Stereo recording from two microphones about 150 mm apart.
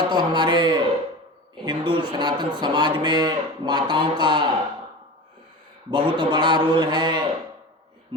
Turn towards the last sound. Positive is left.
turn(degrees=-30)  # may be behind; listen again after turning